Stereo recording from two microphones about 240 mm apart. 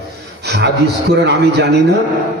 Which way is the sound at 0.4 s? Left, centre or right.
Right.